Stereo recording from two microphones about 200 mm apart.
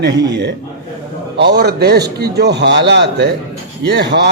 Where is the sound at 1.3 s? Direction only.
55° right (ahead or behind).